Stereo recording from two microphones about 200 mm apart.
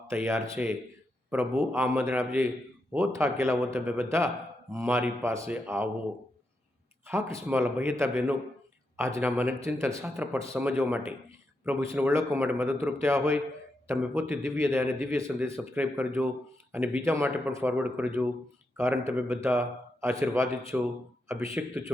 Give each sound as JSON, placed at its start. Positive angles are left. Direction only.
{"t": 0.1, "sound": "a man's voice", "side_deg": -15}
{"t": 7.1, "sound": "a man's voice", "side_deg": -15}